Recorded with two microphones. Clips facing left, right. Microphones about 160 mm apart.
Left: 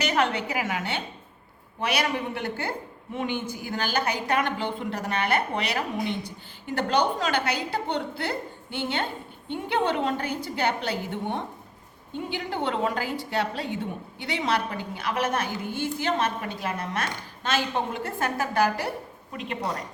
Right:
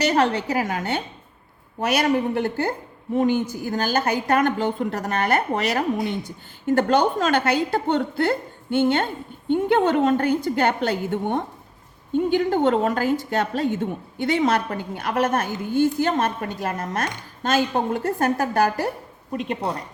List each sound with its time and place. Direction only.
0.0 s a woman's voice: 40° right (ahead or behind)